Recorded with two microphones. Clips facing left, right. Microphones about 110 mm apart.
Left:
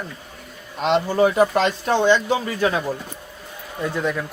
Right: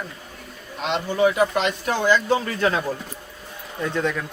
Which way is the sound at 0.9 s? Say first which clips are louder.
Left 3 dB; 35° left (ahead or behind).